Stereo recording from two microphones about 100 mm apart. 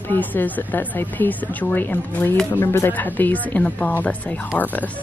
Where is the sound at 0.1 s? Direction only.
20° left (ahead or behind).